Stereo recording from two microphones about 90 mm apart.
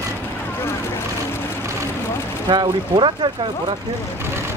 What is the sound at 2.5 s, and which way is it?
Speech, 60° right (ahead or behind).